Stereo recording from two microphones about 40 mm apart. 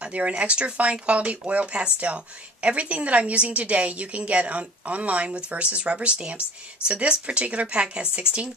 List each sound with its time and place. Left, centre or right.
0.4 s a woman's voice: right